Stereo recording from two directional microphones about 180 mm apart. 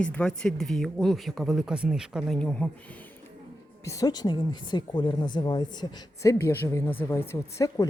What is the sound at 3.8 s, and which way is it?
Speech, 20° left (ahead or behind).